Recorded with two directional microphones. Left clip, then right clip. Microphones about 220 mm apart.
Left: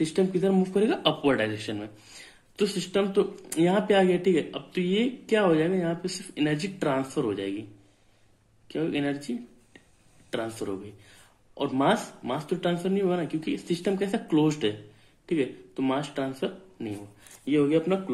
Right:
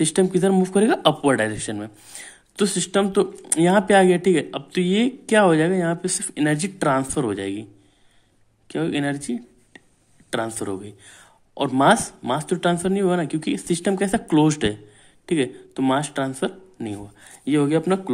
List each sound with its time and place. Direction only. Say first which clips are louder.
0.0 s speech: right 6 dB; 40° right (ahead or behind)
8.6 s speech: right 5 dB; 40° right (ahead or behind)